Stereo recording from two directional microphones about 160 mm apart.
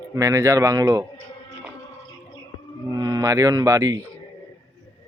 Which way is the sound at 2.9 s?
25° right (ahead or behind).